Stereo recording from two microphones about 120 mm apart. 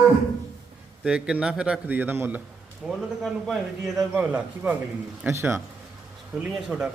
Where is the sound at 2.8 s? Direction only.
5° right (ahead or behind); by 5.5 s 20° right (ahead or behind).